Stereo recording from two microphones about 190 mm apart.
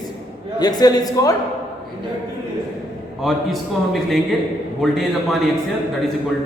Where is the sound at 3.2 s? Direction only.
Centre (ahead or behind).